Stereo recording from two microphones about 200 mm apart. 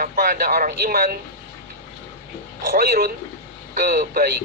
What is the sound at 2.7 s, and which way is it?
Speech, 50° right (ahead or behind).